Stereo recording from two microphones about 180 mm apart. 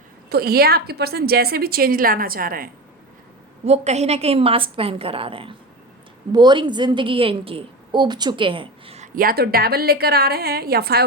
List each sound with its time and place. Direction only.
0.3 s a woman's voice: 60° right (ahead or behind)
3.7 s a woman's voice: 35° right (ahead or behind)
9.1 s a woman's voice: 55° right (ahead or behind)